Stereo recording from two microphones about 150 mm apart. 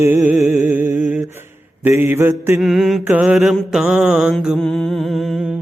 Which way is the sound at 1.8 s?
15° right (ahead or behind).